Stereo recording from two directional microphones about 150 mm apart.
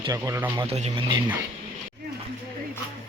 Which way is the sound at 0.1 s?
20° right (ahead or behind).